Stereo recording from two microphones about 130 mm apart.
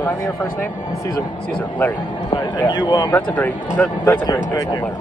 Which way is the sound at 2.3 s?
35° left (ahead or behind).